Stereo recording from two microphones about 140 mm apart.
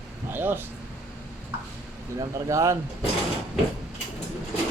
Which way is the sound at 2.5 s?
20° right (ahead or behind).